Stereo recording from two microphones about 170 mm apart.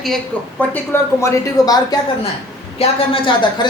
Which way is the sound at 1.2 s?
20° left (ahead or behind).